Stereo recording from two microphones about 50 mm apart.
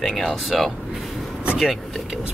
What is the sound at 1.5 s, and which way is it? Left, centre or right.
Vehicle, centre.